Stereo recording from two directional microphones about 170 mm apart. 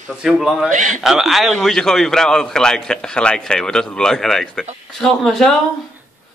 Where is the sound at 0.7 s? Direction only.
50° right (ahead or behind).